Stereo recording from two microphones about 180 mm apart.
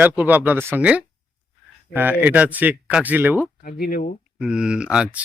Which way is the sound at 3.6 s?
55° left (ahead or behind).